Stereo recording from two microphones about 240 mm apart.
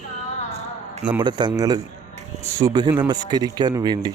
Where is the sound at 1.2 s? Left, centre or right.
Centre.